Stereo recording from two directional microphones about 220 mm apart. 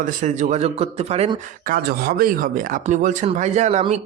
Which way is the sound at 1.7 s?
45° right (ahead or behind).